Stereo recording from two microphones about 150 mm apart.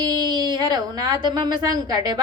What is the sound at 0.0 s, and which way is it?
A woman's voice, 30° right (ahead or behind).